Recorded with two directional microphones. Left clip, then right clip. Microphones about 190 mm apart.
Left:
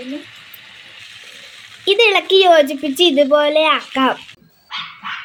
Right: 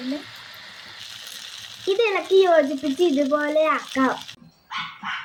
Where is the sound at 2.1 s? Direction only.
15° left (ahead or behind).